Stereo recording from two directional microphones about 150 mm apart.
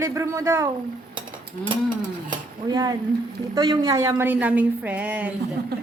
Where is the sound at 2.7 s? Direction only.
25° right (ahead or behind); by 5.3 s 10° right (ahead or behind).